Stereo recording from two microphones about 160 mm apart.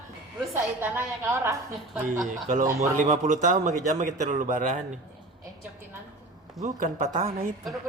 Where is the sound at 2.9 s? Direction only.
55° right (ahead or behind).